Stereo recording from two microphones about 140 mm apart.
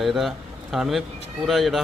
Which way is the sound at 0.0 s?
Centre (ahead or behind).